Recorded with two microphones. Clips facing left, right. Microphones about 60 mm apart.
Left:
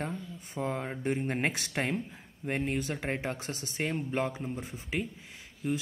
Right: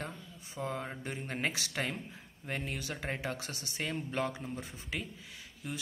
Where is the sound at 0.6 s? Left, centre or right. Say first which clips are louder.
Left 4 dB; left.